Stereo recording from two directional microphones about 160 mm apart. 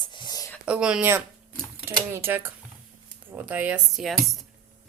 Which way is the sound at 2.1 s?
15° right (ahead or behind).